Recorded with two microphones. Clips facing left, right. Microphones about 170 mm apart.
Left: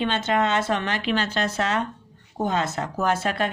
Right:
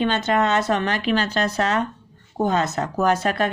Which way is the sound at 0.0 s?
45° right (ahead or behind).